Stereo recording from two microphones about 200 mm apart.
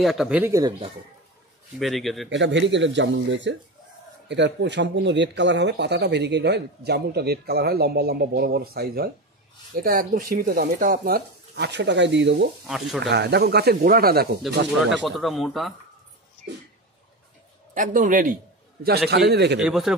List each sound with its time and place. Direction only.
0.0 s speech: centre (ahead or behind); by 0.9 s 25° right (ahead or behind)
1.8 s speech: centre (ahead or behind)
2.2 s speech: 65° right (ahead or behind)
12.6 s speech: centre (ahead or behind)
13.1 s speech: 55° right (ahead or behind)
14.9 s speech: centre (ahead or behind)
17.7 s a man's voice: 40° right (ahead or behind); by 19.6 s 55° right (ahead or behind)
19.6 s speech: centre (ahead or behind)